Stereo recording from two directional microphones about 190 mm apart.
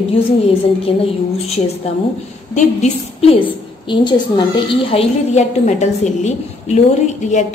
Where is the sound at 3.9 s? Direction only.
25° left (ahead or behind).